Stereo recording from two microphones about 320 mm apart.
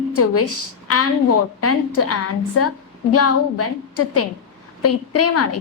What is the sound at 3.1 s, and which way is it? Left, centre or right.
Speech, left.